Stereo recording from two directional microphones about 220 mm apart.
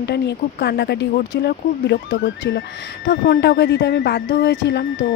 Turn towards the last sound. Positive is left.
turn(degrees=55)  # may be behind; listen again after turning